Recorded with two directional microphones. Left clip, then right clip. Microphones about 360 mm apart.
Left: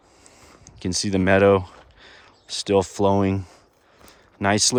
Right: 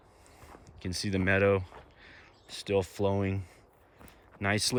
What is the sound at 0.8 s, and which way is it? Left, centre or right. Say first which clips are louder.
Speech: left 10 dB; centre.